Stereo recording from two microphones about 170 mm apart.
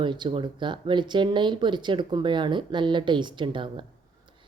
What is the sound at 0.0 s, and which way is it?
Speech, 30° right (ahead or behind).